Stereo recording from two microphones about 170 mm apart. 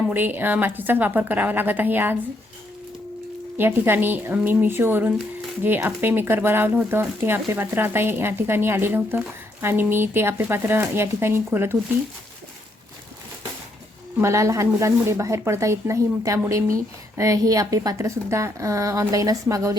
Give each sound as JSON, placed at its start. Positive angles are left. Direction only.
{"t": 0.1, "sound": "speech", "side_deg": -10}
{"t": 3.6, "sound": "speech", "side_deg": -10}
{"t": 14.2, "sound": "speech", "side_deg": -15}